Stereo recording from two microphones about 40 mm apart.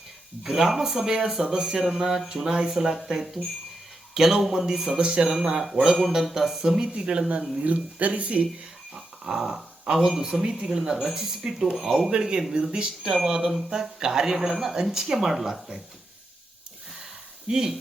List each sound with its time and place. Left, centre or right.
0.4 s speech: centre; by 7.4 s right
7.6 s speech: right
9.0 s dog: centre
9.8 s speech: centre
17.5 s speech: centre